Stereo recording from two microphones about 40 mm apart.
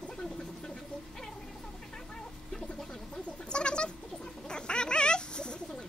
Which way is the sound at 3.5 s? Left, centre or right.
Left.